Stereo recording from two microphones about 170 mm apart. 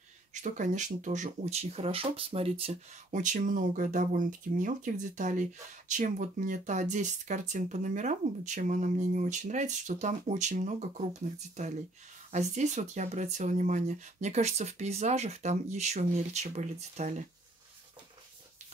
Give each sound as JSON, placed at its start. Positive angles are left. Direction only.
{"t": 0.3, "sound": "speech", "side_deg": -45}